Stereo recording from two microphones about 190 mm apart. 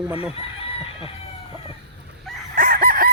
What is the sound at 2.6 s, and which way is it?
Chicken, 50° right (ahead or behind).